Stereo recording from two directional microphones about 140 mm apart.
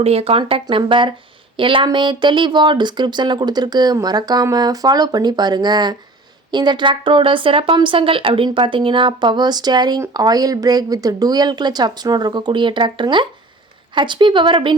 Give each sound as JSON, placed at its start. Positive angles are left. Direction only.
{"t": 0.0, "sound": "speech", "side_deg": -45}